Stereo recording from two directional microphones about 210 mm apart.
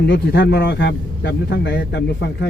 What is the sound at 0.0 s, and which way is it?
A man's voice, 55° left (ahead or behind).